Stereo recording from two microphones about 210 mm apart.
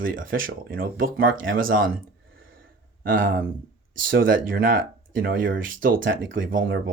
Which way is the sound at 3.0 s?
40° right (ahead or behind).